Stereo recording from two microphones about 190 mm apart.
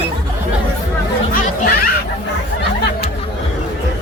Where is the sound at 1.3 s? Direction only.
50° left (ahead or behind).